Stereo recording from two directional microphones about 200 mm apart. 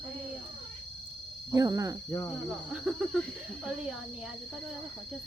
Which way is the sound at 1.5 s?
20° right (ahead or behind).